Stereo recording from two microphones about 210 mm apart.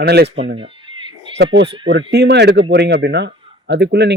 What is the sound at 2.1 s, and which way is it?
Speech, 55° right (ahead or behind).